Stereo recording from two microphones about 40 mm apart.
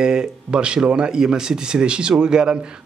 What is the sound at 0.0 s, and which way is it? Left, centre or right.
A man's voice, centre.